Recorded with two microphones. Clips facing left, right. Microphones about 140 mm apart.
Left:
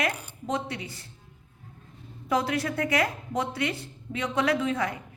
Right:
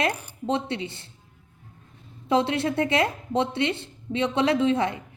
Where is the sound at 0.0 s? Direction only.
30° right (ahead or behind).